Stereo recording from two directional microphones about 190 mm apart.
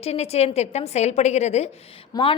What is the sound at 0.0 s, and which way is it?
A woman's voice, 35° left (ahead or behind).